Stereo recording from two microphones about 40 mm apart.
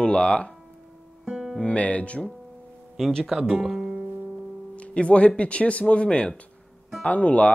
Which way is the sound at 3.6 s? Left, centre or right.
Centre.